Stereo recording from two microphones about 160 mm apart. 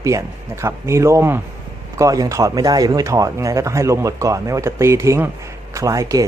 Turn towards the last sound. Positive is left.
turn(degrees=-20)  # may be behind; listen again after turning